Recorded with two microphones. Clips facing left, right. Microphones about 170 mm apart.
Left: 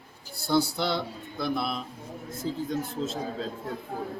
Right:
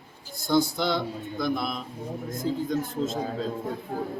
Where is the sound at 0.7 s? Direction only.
5° left (ahead or behind).